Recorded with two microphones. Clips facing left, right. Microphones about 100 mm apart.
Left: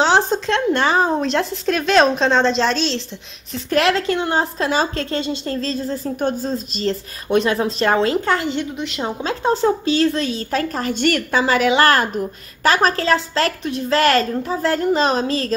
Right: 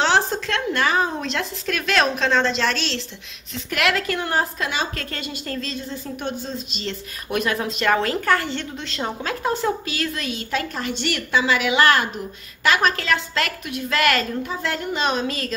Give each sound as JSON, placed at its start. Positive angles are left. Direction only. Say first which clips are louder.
{"t": 0.0, "sound": "a woman's voice", "louder": "left 4 dB", "side_deg": 20}
{"t": 8.7, "sound": "a woman's voice", "louder": "left 5 dB", "side_deg": 5}
{"t": 9.0, "sound": "a woman's voice", "louder": "left 4 dB", "side_deg": 25}